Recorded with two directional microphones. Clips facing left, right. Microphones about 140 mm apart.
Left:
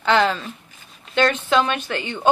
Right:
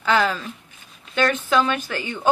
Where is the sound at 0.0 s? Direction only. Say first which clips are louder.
Left 2 dB; 30° left (ahead or behind).